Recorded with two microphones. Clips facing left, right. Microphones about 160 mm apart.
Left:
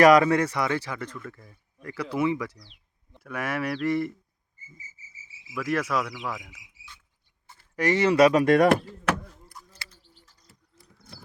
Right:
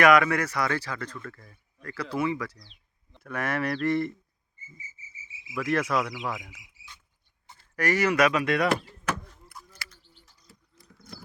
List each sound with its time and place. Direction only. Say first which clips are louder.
0.0 s a man's voice: left 3 dB; 35° left (ahead or behind); by 2.6 s 20° left (ahead or behind)
3.1 s speech: even; 5° left (ahead or behind)
5.5 s cricket: right 1 dB; 5° left (ahead or behind)
7.6 s speech: left 3 dB; 20° left (ahead or behind); by 8.8 s 45° left (ahead or behind)
9.7 s bird: right 1 dB; 25° left (ahead or behind)